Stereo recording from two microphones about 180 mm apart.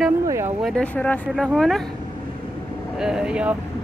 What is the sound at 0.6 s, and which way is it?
Speech, 5° left (ahead or behind).